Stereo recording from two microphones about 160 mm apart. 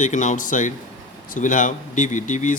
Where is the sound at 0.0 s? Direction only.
50° left (ahead or behind).